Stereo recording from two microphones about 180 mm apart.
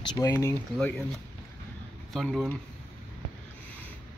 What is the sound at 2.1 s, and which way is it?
Speech, centre (ahead or behind).